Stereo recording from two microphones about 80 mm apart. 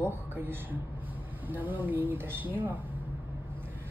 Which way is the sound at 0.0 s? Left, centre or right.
Right.